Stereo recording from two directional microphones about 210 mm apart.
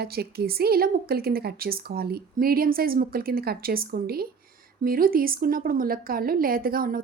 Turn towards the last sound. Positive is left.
turn(degrees=-45)  # may be behind; listen again after turning